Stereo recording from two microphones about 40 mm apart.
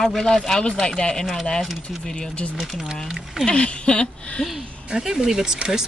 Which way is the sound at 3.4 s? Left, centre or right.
Left.